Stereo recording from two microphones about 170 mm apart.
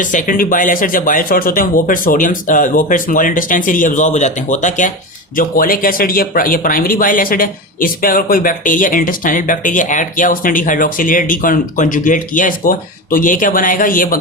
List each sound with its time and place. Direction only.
0.0 s speech: 50° left (ahead or behind)
5.4 s speech: 55° left (ahead or behind)